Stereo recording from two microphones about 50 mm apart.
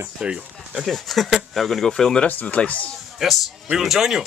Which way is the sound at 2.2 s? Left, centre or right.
Left.